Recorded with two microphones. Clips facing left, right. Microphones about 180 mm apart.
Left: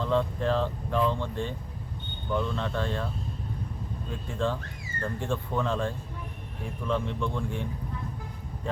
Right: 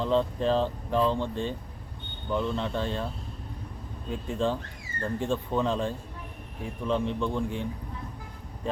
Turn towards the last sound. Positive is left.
turn(degrees=-15)  # may be behind; listen again after turning